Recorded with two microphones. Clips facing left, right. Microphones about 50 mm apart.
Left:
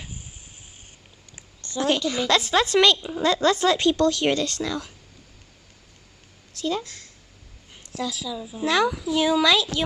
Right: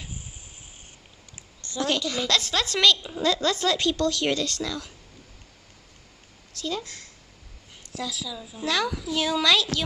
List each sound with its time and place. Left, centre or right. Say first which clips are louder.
1.8 s a woman's voice: left 3 dB; centre
6.5 s a sound: left 4 dB; centre
8.0 s a woman's voice: left 4 dB; centre